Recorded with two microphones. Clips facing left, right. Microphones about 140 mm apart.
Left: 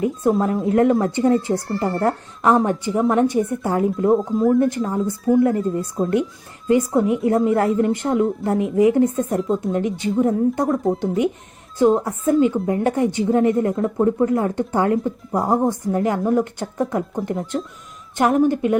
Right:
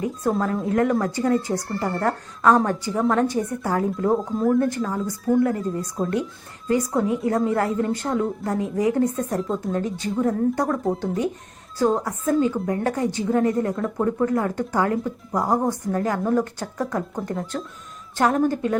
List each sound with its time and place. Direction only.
0.0 s a woman's voice: 25° left (ahead or behind)
4.1 s speech: centre (ahead or behind)
4.6 s a woman's voice: 25° left (ahead or behind)
5.0 s speech: 5° left (ahead or behind)
5.4 s a woman's voice: 25° left (ahead or behind)
6.0 s speech: centre (ahead or behind)
6.7 s a woman's voice: 25° left (ahead or behind)
9.4 s speech: centre (ahead or behind)
9.7 s a woman's voice: 20° left (ahead or behind)